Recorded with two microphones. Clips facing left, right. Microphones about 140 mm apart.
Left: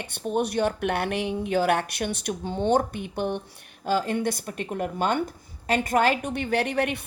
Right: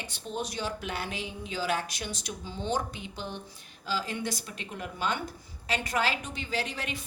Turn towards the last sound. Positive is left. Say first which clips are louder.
# left 9 dB
turn(degrees=60)  # may be behind; listen again after turning